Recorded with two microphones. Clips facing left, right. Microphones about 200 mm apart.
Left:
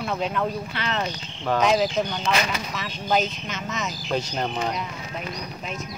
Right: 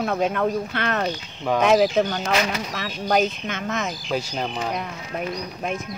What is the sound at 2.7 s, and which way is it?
Speech, 65° right (ahead or behind).